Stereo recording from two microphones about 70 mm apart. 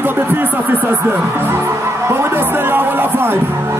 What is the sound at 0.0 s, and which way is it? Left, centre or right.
Music, right.